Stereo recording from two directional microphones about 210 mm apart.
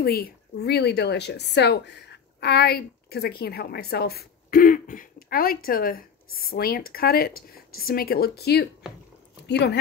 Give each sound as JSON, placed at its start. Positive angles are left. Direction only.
{"t": 0.0, "sound": "a woman's voice", "side_deg": 45}